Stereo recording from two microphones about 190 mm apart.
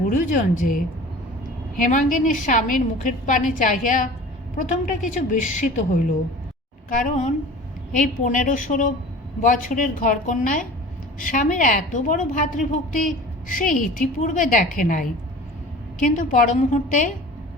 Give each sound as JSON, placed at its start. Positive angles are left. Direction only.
{"t": 0.1, "sound": "a woman's voice", "side_deg": 40}
{"t": 6.9, "sound": "a woman's voice", "side_deg": 40}